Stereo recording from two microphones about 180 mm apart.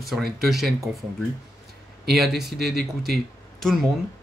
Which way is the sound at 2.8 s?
60° right (ahead or behind).